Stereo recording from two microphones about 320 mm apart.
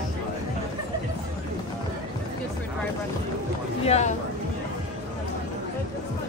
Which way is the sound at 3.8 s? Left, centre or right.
Left.